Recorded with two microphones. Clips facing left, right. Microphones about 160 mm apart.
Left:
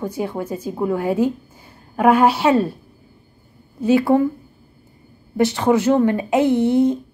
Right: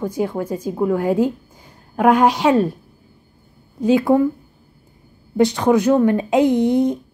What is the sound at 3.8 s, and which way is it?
Speech, 15° right (ahead or behind).